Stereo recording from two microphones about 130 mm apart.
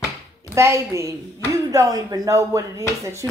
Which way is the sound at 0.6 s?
20° right (ahead or behind).